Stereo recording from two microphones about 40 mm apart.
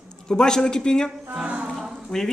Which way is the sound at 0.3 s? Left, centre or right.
Centre.